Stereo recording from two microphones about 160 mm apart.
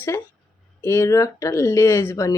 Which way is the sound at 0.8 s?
15° left (ahead or behind).